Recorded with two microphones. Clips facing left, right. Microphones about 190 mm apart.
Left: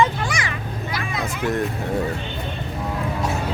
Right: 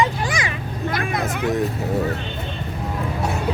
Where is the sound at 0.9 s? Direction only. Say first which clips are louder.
Right 4 dB; 55° right (ahead or behind).